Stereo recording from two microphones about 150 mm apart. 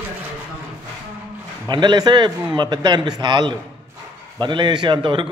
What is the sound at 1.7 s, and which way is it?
A man's voice, 30° right (ahead or behind).